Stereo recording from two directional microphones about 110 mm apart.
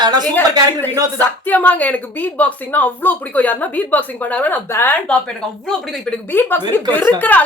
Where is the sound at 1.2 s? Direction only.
15° left (ahead or behind).